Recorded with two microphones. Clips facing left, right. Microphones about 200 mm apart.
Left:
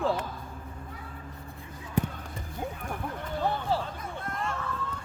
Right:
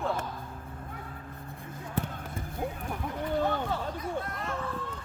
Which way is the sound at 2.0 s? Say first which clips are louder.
Left 4 dB; 15° left (ahead or behind).